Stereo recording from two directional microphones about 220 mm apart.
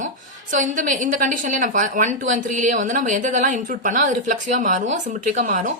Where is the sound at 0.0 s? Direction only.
35° right (ahead or behind).